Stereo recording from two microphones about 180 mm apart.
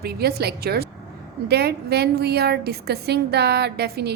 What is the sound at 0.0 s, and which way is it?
A woman's voice, 60° right (ahead or behind).